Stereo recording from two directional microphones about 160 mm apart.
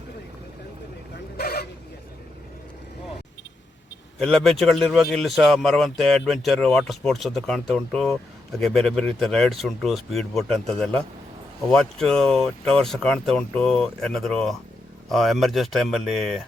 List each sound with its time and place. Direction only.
1.4 s chicken: 80° left
4.2 s speech: centre (ahead or behind)